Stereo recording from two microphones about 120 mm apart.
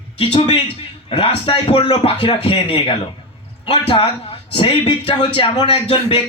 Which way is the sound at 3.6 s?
50° left (ahead or behind).